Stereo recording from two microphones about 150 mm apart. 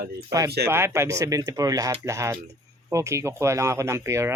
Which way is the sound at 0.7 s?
15° right (ahead or behind).